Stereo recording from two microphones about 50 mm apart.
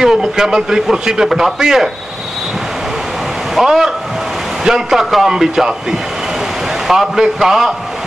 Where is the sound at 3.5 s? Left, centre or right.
Centre.